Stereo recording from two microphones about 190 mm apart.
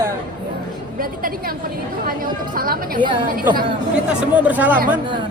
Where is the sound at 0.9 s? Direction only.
50° right (ahead or behind).